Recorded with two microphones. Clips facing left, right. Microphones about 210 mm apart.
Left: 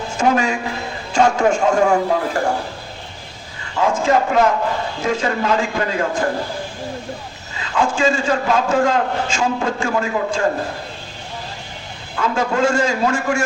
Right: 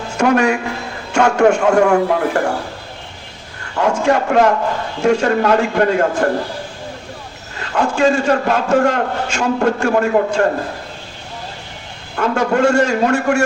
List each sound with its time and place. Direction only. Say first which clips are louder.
0.2 s a man's voice: right 4 dB; 65° right (ahead or behind)
3.8 s a man's voice: right 1 dB; 65° right (ahead or behind)
7.5 s a man's voice: right 1 dB; 65° right (ahead or behind)
12.1 s a man's voice: right 4 dB; 60° right (ahead or behind)